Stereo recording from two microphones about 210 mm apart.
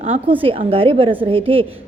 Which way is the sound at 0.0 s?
25° right (ahead or behind).